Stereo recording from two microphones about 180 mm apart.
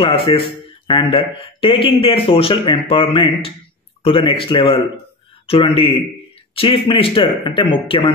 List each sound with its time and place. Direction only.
0.0 s speech: 30° left (ahead or behind)